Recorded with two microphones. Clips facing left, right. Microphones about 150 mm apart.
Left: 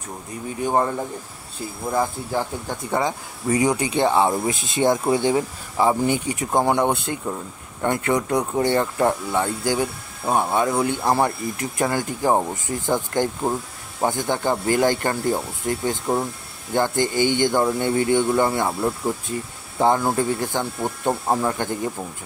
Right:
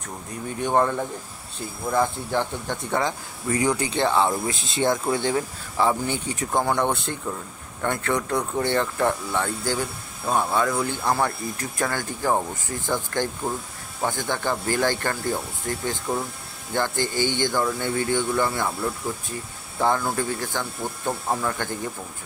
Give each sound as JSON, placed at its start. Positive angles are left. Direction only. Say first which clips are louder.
{"t": 0.6, "sound": "speech", "louder": "even", "side_deg": 5}